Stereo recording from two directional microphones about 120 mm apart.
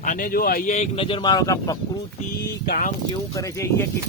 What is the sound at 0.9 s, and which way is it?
Speech, 45° left (ahead or behind).